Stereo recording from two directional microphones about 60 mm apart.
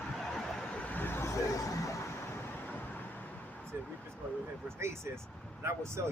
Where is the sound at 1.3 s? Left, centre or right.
Left.